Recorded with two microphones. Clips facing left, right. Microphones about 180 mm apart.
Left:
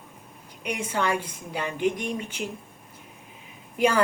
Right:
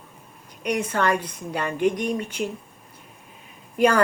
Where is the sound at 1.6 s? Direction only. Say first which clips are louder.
Right 3 dB; 50° right (ahead or behind).